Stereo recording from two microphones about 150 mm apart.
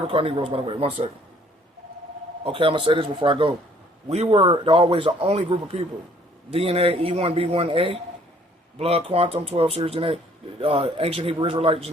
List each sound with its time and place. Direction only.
0.1 s a man's voice: 35° right (ahead or behind)
2.4 s a man's voice: 35° right (ahead or behind)